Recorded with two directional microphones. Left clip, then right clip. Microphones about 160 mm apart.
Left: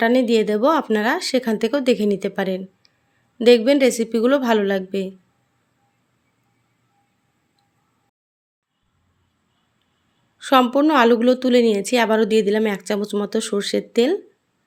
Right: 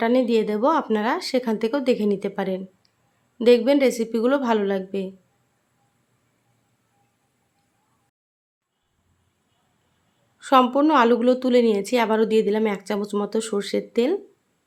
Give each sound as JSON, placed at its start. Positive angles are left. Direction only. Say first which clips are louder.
{"t": 0.0, "sound": "a woman's voice", "louder": "left 3 dB", "side_deg": 20}
{"t": 10.3, "sound": "a woman's voice", "louder": "left 1 dB", "side_deg": 15}